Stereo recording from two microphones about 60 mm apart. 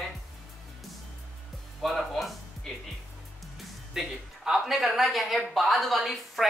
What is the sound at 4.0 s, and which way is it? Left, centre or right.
Speech, centre.